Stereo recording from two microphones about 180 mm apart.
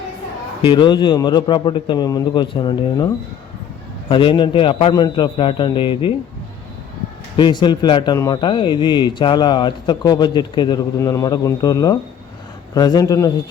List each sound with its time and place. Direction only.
0.6 s speech: 25° left (ahead or behind)
4.1 s speech: 25° left (ahead or behind)
7.3 s speech: 25° left (ahead or behind)